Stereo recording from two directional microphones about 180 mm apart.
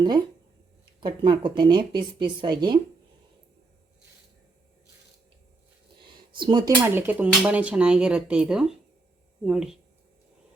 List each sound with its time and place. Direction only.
1.0 s speech: 25° right (ahead or behind)
6.0 s speech: 25° right (ahead or behind); by 9.7 s 5° right (ahead or behind)